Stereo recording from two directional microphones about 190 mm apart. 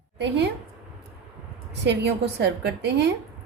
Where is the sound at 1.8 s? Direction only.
65° right (ahead or behind).